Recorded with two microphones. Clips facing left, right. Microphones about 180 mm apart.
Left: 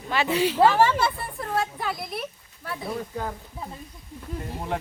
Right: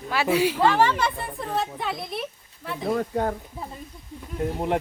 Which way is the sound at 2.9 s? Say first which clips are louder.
Right 8 dB; 50° right (ahead or behind).